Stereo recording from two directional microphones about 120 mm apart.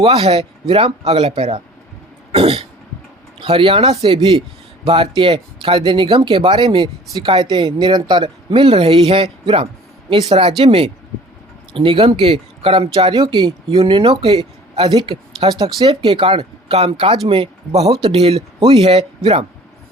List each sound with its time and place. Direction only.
0.0 s speech: 50° right (ahead or behind)